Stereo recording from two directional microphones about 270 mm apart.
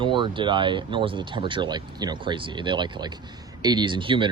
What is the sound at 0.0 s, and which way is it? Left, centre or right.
Speech, centre.